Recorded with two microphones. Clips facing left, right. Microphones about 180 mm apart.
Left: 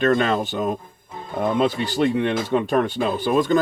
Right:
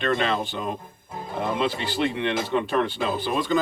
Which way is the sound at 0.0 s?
45° left (ahead or behind).